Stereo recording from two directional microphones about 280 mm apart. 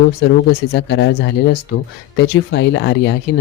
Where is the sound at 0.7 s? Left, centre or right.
Left.